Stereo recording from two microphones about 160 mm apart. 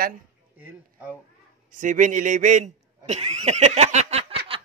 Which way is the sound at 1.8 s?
55° right (ahead or behind).